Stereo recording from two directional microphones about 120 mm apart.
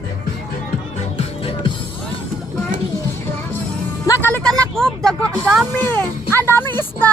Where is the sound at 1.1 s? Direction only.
50° left (ahead or behind).